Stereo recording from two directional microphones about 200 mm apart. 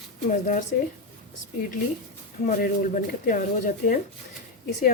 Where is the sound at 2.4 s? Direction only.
45° left (ahead or behind).